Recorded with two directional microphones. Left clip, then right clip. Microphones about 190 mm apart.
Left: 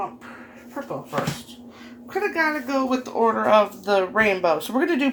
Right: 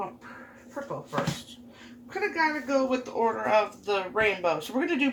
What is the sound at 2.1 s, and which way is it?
Speech, 35° left (ahead or behind).